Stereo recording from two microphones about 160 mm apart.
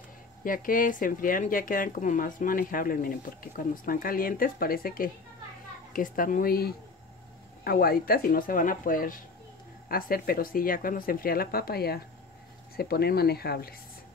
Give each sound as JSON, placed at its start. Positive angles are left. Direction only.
{"t": 0.4, "sound": "speech", "side_deg": 60}